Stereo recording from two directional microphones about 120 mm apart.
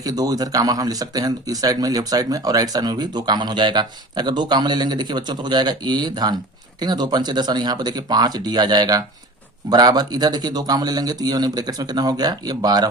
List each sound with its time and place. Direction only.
0.0 s speech: 30° right (ahead or behind)